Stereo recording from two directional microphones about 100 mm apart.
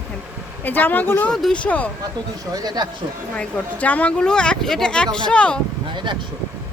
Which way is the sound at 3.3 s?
15° left (ahead or behind).